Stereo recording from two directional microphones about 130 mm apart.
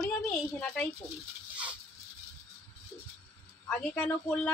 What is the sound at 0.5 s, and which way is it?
Speech, 10° left (ahead or behind).